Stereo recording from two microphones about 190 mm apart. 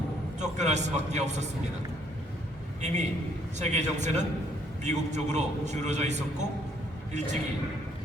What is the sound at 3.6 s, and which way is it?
A man's voice, 35° right (ahead or behind).